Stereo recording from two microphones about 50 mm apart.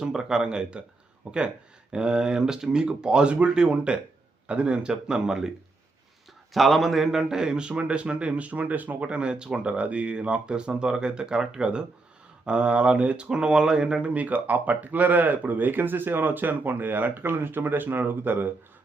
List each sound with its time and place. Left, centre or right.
0.0 s speech: centre
6.5 s a man's voice: centre; by 9.0 s right
9.0 s a man's voice: right
14.1 s speech: right